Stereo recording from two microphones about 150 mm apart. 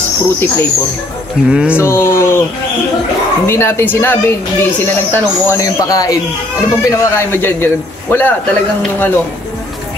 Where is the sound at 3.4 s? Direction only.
15° left (ahead or behind).